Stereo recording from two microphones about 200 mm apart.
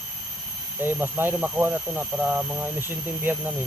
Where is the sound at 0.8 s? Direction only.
10° right (ahead or behind).